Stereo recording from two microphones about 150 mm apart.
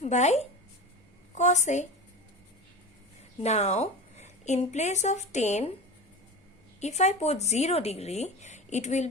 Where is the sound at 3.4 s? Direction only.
50° left (ahead or behind).